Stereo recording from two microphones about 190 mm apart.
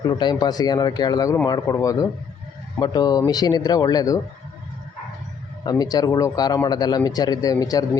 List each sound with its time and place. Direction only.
0.0 s a man's voice: 20° left (ahead or behind)
5.6 s a man's voice: 20° left (ahead or behind)